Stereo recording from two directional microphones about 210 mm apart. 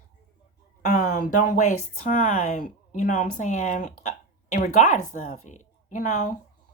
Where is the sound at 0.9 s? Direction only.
45° left (ahead or behind).